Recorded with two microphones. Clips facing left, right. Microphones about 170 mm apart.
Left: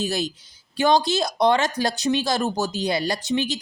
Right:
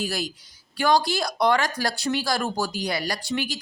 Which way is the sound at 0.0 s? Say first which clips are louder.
Left 3 dB; 25° left (ahead or behind).